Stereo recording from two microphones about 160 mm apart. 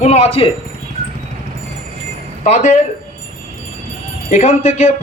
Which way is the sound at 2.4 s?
45° left (ahead or behind).